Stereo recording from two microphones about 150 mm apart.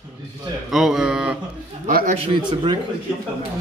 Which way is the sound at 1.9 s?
75° right (ahead or behind).